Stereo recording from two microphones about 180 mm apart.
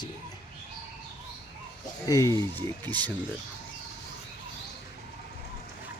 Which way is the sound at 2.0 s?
15° left (ahead or behind).